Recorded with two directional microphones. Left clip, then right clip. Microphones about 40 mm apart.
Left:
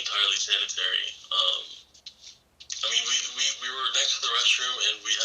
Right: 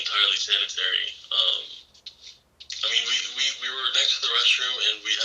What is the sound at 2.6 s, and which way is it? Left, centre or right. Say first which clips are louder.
Speech: right 2 dB; left.